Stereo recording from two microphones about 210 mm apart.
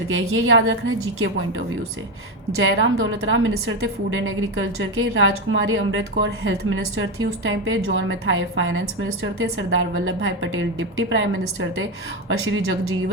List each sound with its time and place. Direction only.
0.1 s a woman's voice: 70° right (ahead or behind)
12.3 s a woman's voice: 75° right (ahead or behind)